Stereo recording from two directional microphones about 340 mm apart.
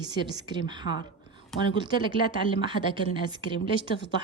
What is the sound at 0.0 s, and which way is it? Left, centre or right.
Speech, centre.